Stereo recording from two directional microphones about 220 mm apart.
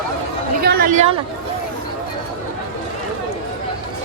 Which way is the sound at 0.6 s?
45° right (ahead or behind).